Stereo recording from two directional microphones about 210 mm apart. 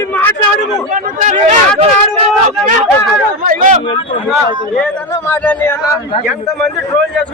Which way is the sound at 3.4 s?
35° right (ahead or behind).